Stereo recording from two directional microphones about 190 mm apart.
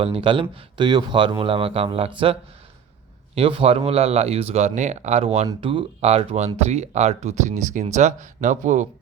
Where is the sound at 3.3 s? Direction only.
30° right (ahead or behind).